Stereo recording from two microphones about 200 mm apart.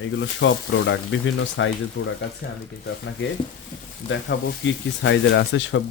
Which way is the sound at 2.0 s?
60° left (ahead or behind).